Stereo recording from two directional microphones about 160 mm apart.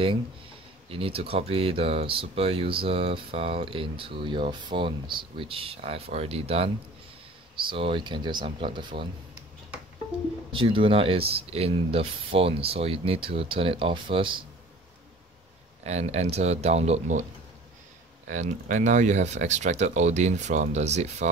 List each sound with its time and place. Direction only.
0.8 s speech: 35° right (ahead or behind)
10.5 s speech: 30° right (ahead or behind)
15.8 s speech: 45° right (ahead or behind)
18.3 s speech: 50° right (ahead or behind)